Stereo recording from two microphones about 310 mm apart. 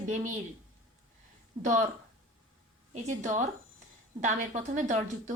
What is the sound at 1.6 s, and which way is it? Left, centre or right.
Speech, right.